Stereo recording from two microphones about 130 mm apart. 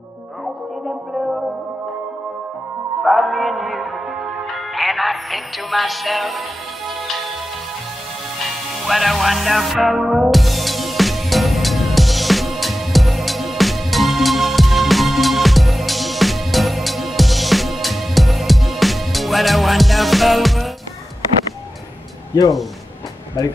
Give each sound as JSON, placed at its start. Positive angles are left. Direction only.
{"t": 3.0, "sound": "music", "side_deg": 0}
{"t": 8.8, "sound": "music", "side_deg": 0}